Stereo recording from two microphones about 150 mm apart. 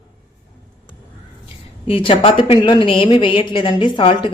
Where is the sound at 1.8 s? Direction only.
35° left (ahead or behind).